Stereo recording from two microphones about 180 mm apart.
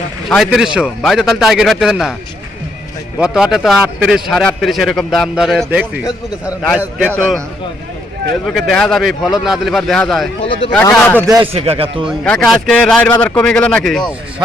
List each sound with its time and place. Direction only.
0.3 s a man's voice: centre (ahead or behind)
3.2 s a man's voice: 5° right (ahead or behind)
8.5 s a man's voice: centre (ahead or behind)
10.4 s speech: 30° left (ahead or behind)
10.8 s speech: 15° left (ahead or behind)
11.5 s a man's voice: 30° right (ahead or behind)
12.2 s a man's voice: 5° left (ahead or behind)